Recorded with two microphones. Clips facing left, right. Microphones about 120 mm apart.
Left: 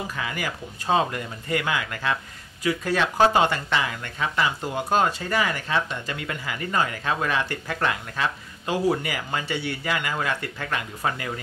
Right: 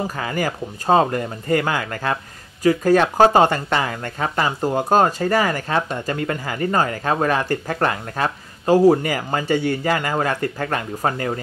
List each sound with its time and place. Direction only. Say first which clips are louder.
0.0 s speech: right 7 dB; 40° right (ahead or behind)